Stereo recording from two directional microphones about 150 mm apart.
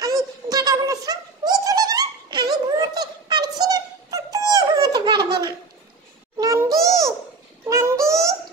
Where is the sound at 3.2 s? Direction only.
30° right (ahead or behind).